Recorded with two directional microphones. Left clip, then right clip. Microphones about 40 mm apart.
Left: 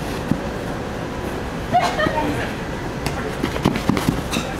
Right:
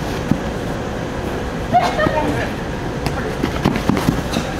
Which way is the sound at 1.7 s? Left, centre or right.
Centre.